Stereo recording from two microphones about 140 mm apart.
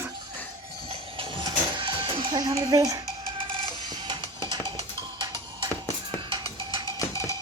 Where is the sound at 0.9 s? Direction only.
40° right (ahead or behind).